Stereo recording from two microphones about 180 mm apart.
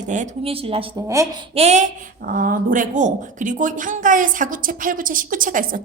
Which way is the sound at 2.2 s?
50° right (ahead or behind).